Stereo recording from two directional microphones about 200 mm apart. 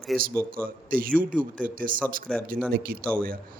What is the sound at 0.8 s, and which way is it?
A man's voice, 45° right (ahead or behind).